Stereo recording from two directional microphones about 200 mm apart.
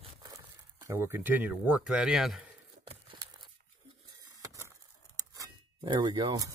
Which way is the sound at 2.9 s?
25° right (ahead or behind).